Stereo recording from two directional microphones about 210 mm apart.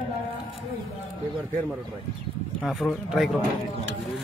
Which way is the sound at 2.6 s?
Centre (ahead or behind).